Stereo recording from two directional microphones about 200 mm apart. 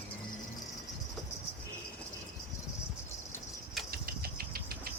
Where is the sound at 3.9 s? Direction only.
50° right (ahead or behind).